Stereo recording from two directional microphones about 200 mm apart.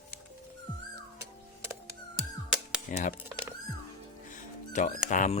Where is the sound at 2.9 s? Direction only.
40° left (ahead or behind).